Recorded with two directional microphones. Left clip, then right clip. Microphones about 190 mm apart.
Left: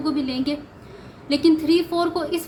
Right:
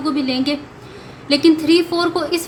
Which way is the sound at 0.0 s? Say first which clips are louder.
Right 5 dB; 5° right (ahead or behind).